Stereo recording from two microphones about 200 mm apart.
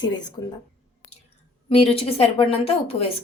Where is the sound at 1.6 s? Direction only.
30° left (ahead or behind).